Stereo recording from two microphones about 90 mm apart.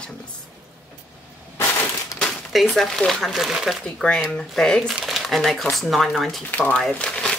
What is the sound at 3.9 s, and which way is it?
Speech, 10° left (ahead or behind).